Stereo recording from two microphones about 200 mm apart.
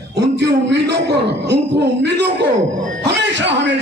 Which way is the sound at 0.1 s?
60° right (ahead or behind).